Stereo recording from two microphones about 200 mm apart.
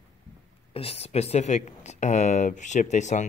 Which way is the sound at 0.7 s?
30° left (ahead or behind).